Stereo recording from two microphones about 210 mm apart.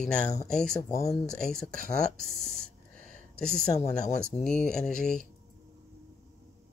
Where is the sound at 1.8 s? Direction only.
45° right (ahead or behind).